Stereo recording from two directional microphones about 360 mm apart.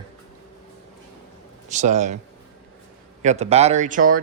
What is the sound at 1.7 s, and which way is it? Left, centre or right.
Speech, centre.